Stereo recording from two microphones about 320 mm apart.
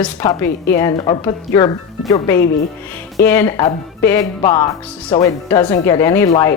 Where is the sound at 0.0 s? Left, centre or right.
Centre.